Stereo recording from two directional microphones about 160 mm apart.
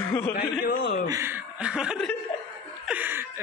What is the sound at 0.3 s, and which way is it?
Speech, 65° left (ahead or behind).